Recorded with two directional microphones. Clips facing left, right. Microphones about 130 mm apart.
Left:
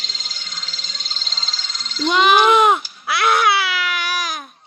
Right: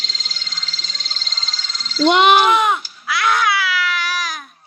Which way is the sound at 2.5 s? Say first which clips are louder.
Left 3 dB; 30° left (ahead or behind).